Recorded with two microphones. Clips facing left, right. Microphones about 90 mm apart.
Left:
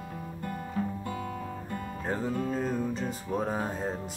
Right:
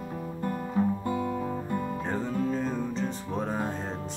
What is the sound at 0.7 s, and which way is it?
Music, 20° right (ahead or behind).